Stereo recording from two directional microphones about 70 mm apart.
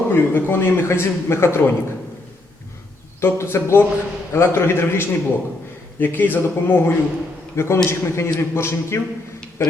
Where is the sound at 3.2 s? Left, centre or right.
Left.